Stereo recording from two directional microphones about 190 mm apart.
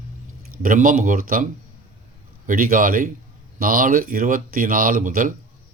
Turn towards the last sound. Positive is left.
turn(degrees=-45)  # may be behind; listen again after turning